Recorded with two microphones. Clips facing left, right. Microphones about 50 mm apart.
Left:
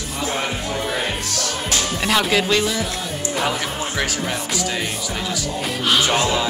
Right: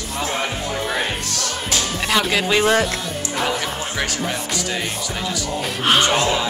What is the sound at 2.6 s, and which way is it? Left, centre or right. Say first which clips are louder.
Speech: right 6 dB; right.